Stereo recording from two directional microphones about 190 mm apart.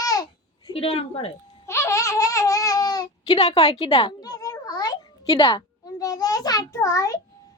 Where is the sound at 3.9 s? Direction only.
25° left (ahead or behind).